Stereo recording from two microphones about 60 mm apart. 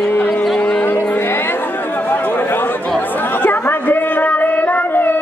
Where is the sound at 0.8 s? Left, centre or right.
Left.